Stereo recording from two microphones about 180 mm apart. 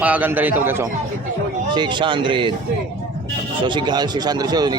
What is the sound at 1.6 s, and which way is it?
Speech, 25° right (ahead or behind).